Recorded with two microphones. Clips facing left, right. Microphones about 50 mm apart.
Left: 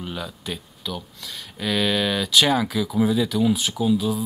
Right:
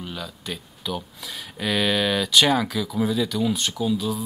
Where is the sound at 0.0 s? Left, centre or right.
Centre.